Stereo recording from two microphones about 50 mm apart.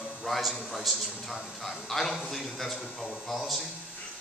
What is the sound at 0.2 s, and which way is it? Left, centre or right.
A man's voice, centre.